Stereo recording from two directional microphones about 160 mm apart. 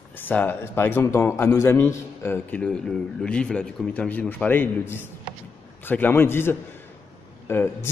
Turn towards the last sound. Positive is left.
turn(degrees=15)  # may be behind; listen again after turning